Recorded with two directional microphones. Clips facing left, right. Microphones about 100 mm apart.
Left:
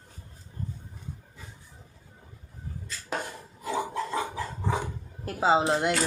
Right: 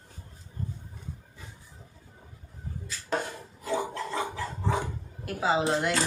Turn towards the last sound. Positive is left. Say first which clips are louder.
# left 2 dB
turn(degrees=20)  # may be behind; listen again after turning